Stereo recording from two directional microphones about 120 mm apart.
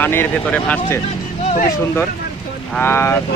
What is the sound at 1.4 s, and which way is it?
Vehicle, 75° left (ahead or behind).